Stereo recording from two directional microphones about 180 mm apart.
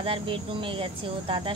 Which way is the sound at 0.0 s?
30° right (ahead or behind).